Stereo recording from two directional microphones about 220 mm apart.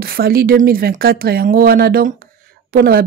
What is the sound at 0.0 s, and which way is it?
Speech, 45° right (ahead or behind).